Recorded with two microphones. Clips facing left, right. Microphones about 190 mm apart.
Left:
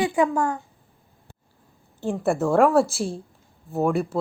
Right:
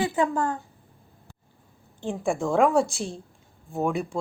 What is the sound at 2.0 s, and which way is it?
Speech, 5° left (ahead or behind).